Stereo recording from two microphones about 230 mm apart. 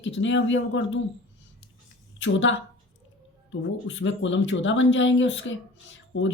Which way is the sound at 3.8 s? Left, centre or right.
Left.